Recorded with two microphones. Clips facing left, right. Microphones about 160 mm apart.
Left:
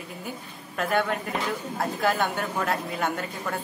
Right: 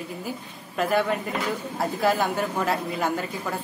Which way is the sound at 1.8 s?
Centre (ahead or behind).